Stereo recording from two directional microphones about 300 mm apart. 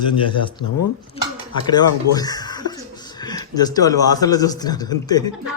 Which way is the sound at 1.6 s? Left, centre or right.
Centre.